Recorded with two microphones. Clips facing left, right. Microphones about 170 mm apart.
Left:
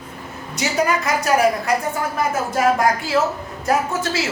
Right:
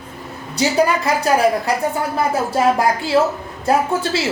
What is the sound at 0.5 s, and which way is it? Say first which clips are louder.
A woman's voice: right 4 dB; 30° right (ahead or behind).